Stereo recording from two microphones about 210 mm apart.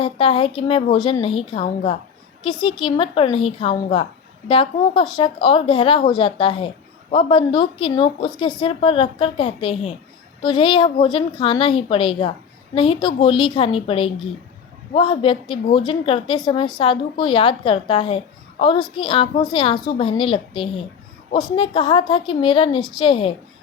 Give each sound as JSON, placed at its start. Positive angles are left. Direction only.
{"t": 0.0, "sound": "speech", "side_deg": 25}